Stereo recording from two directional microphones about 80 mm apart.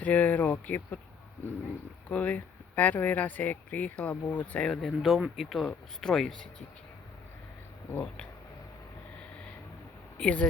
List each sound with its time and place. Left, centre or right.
0.0 s speech: centre
2.0 s speech: centre
4.7 s speech: centre
7.9 s speech: centre
10.2 s speech: centre